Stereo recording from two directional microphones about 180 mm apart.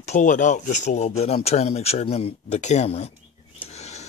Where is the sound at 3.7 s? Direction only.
40° left (ahead or behind).